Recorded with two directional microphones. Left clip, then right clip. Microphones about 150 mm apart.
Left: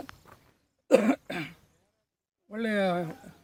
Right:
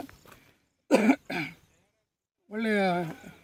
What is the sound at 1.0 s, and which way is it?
Cough, 15° left (ahead or behind).